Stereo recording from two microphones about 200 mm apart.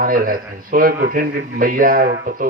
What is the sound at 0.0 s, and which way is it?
A man's voice, 45° right (ahead or behind).